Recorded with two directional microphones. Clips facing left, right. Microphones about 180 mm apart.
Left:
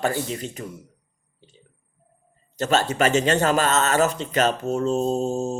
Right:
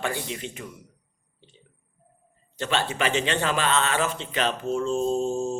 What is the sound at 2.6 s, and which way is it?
A man's voice, 40° left (ahead or behind).